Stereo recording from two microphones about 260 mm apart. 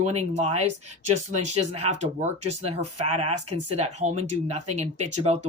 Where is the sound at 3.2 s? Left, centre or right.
Right.